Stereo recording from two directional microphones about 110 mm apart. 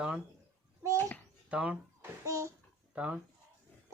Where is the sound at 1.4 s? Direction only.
10° right (ahead or behind).